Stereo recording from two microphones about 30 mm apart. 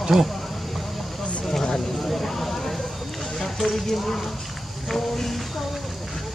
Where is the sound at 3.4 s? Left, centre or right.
Centre.